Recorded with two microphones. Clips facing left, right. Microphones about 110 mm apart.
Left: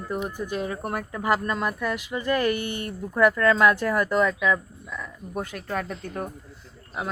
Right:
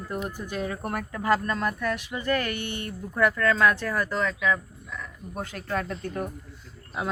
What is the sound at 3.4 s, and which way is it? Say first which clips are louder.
Speech: left 3 dB; 15° left (ahead or behind).